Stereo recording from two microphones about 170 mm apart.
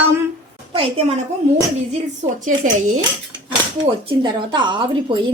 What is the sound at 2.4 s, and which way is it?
Speech, 45° right (ahead or behind).